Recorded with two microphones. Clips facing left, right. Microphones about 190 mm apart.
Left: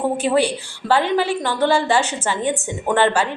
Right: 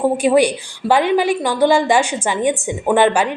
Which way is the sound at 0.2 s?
15° right (ahead or behind).